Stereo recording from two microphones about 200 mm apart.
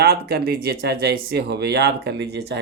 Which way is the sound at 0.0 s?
50° right (ahead or behind).